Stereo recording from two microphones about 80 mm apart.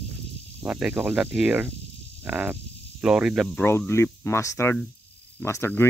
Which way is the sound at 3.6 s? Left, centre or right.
Left.